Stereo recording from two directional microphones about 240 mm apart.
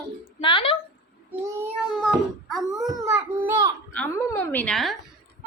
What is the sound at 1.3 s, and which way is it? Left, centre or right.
Child singing, centre.